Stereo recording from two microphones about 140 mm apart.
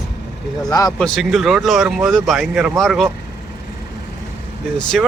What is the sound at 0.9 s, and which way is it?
Speech, 5° left (ahead or behind).